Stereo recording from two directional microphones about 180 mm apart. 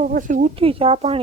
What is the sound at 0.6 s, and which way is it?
Speech, 30° right (ahead or behind).